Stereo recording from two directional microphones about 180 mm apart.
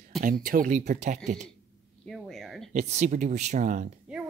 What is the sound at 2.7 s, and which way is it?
Speech, 40° right (ahead or behind).